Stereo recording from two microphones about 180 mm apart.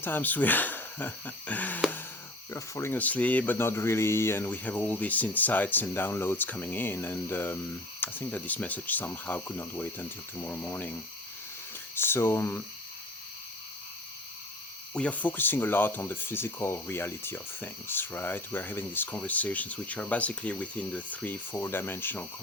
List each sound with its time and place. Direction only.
0.0 s a sound: 10° left (ahead or behind)
2.5 s speech: 15° left (ahead or behind)
11.9 s speech: 10° left (ahead or behind)
14.9 s speech: 10° left (ahead or behind)